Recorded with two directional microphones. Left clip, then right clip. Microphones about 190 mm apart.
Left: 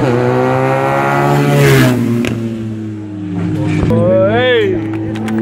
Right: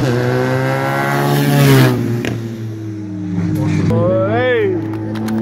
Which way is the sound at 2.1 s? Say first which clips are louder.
Left 5 dB; 45° left (ahead or behind).